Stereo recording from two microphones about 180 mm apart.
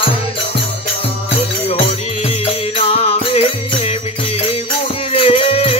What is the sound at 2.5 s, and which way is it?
Music, 35° left (ahead or behind).